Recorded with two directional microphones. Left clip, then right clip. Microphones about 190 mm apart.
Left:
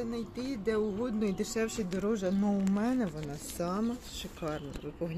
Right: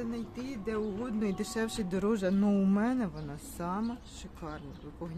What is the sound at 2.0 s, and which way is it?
Speech, 30° right (ahead or behind).